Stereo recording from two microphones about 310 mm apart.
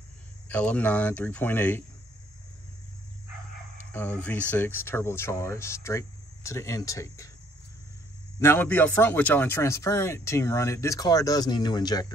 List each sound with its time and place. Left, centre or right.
0.5 s speech: centre
3.9 s speech: centre
8.4 s speech: centre